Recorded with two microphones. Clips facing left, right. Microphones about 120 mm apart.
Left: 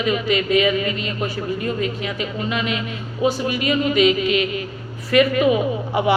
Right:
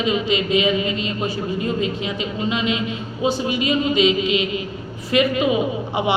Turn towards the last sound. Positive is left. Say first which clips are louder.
# left 2 dB
turn(degrees=-25)  # may be behind; listen again after turning